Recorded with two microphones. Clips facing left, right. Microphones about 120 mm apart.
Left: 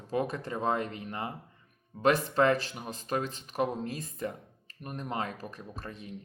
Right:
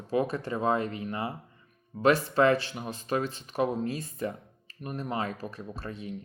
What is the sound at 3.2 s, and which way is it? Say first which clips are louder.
Speech: right 3 dB; 40° right (ahead or behind).